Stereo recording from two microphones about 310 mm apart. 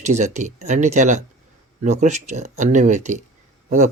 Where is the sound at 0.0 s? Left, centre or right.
Right.